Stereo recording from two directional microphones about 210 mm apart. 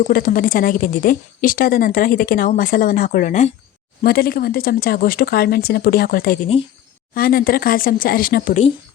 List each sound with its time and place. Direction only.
0.0 s a woman's voice: 40° left (ahead or behind)